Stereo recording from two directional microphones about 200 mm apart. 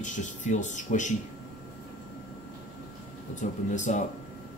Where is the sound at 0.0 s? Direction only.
40° left (ahead or behind).